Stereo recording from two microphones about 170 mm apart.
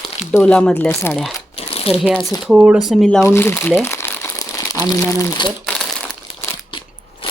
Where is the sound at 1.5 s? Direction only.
35° left (ahead or behind).